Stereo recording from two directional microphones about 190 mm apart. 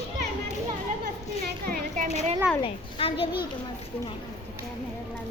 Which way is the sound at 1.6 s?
50° right (ahead or behind).